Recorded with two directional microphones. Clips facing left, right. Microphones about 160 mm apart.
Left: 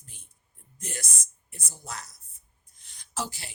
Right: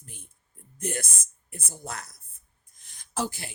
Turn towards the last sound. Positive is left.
turn(degrees=-50)  # may be behind; listen again after turning